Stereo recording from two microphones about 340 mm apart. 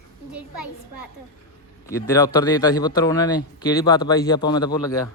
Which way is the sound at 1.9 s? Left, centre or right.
Centre.